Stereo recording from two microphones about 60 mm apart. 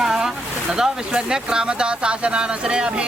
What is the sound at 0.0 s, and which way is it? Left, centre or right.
Speech, centre.